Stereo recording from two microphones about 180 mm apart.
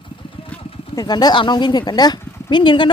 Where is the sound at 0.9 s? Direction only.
25° left (ahead or behind).